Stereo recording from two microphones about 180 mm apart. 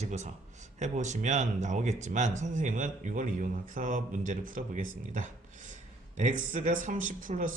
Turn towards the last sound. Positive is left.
turn(degrees=-45)  # may be behind; listen again after turning